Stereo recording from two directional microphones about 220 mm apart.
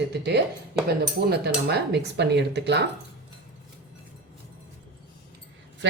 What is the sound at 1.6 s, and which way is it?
A woman's voice, 50° right (ahead or behind).